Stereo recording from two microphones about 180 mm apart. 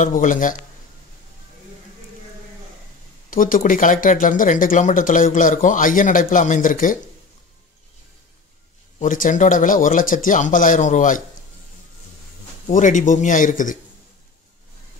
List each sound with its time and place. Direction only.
0.0 s speech: 45° left (ahead or behind)
3.3 s speech: 50° left (ahead or behind)
9.0 s speech: 45° left (ahead or behind)
12.6 s speech: 45° left (ahead or behind)